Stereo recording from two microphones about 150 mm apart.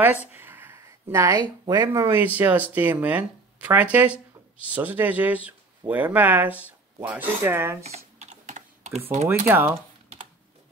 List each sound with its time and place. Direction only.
0.0 s a sound: 15° right (ahead or behind)
1.7 s speech: 25° right (ahead or behind)
2.0 s speech: 10° right (ahead or behind)
7.8 s typing: 50° right (ahead or behind)
9.5 s speech: 15° right (ahead or behind)